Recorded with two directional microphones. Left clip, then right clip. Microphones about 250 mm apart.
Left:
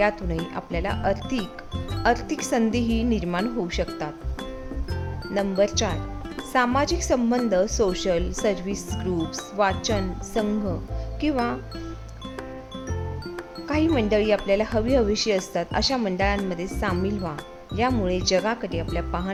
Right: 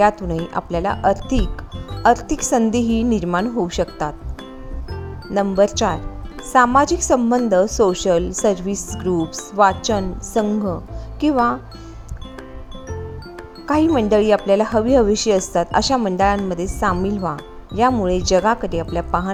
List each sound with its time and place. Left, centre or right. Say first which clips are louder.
0.0 s speech: right 7 dB; centre
5.3 s speech: right 6 dB; centre
13.7 s speech: right 6 dB; centre